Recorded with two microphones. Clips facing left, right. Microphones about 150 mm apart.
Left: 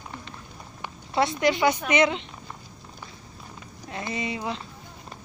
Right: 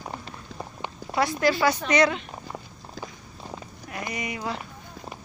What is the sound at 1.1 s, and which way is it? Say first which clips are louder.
Speech: even; 25° left (ahead or behind).